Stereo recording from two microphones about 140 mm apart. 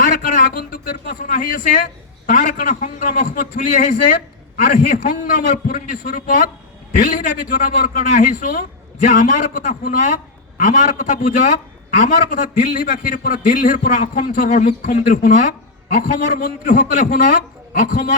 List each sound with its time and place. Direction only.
0.0 s a man's voice: 70° left (ahead or behind)
6.9 s a man's voice: 65° left (ahead or behind)